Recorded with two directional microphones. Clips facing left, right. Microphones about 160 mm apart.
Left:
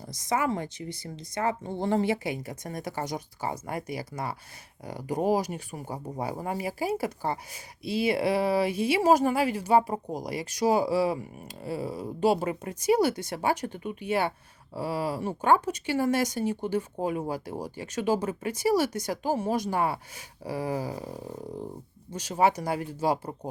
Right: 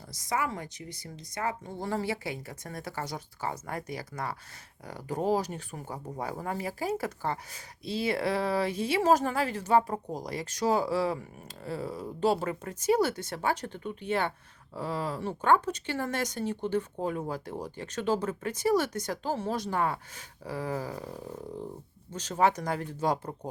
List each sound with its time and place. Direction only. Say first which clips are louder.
0.1 s speech: left 4 dB; 20° left (ahead or behind)